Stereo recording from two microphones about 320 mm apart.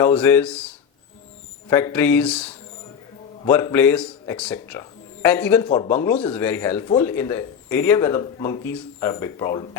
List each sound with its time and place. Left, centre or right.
0.0 s speech: centre
1.7 s speech: centre